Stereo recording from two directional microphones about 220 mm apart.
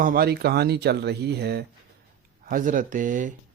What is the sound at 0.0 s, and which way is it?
Speech, 40° right (ahead or behind).